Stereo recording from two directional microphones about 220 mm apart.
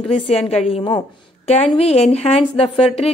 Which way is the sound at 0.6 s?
25° left (ahead or behind).